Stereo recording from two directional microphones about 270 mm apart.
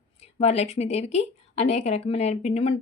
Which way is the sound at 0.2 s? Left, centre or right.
Left.